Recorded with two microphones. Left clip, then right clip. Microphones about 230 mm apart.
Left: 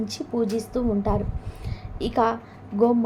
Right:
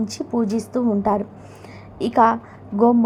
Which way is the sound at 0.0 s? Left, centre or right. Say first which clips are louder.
Right 3 dB; right.